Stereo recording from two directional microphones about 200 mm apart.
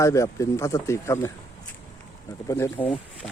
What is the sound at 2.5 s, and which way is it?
Speech, 15° left (ahead or behind).